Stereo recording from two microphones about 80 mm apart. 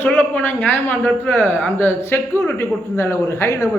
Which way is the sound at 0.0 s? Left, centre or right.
Left.